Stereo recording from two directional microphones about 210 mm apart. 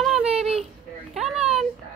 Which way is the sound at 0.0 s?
5° right (ahead or behind).